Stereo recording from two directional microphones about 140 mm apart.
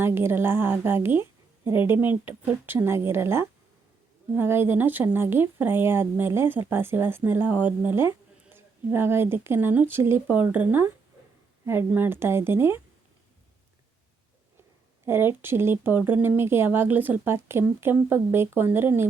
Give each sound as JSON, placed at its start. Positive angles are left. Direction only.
{"t": 0.0, "sound": "speech", "side_deg": -15}
{"t": 15.0, "sound": "speech", "side_deg": -15}